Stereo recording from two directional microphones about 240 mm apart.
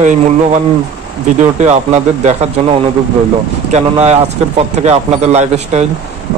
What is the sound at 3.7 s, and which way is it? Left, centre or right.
Speech, right.